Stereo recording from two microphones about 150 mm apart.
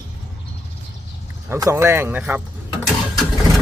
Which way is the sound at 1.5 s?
20° right (ahead or behind).